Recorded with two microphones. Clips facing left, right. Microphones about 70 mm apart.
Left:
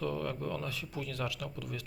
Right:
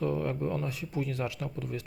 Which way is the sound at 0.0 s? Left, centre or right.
Right.